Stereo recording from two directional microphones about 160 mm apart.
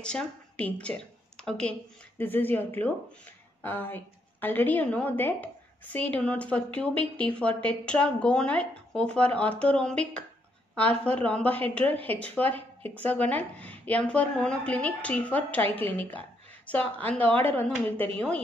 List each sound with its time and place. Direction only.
0.0 s a woman's voice: 5° left (ahead or behind)
15.6 s a woman's voice: 35° right (ahead or behind)
16.0 s a sound: 10° left (ahead or behind)
17.0 s a woman's voice: 10° left (ahead or behind)